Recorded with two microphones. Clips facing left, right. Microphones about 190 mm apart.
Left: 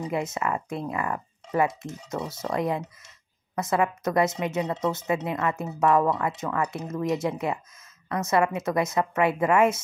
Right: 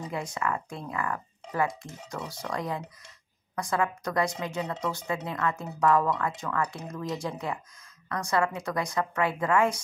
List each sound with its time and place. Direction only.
0.1 s speech: 25° left (ahead or behind)